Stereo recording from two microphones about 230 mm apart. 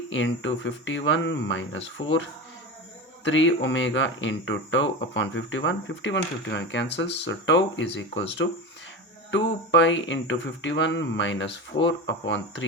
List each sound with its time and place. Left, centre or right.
0.1 s speech: left
3.2 s speech: left